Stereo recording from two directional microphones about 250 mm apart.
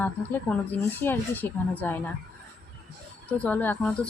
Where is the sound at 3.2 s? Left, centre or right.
Centre.